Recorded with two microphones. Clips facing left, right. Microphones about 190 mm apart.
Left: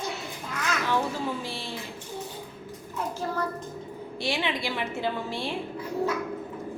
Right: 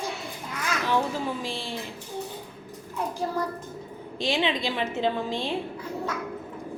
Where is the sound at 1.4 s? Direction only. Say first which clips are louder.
Right 2 dB; 15° right (ahead or behind).